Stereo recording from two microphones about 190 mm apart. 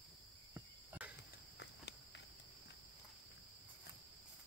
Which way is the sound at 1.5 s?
65° left (ahead or behind).